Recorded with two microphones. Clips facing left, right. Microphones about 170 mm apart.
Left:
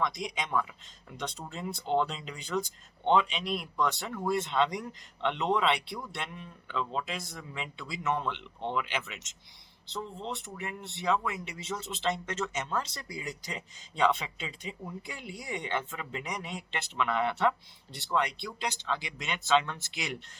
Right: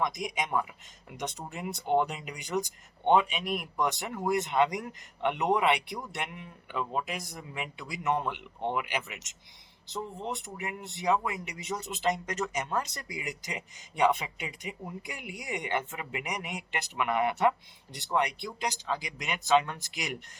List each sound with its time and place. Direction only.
0.0 s speech: 15° right (ahead or behind)
9.9 s speech: 15° right (ahead or behind)